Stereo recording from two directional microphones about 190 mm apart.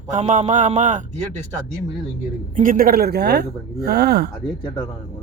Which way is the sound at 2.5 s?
45° right (ahead or behind).